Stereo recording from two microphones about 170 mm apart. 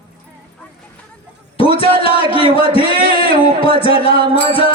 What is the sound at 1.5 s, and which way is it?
Music, 35° left (ahead or behind).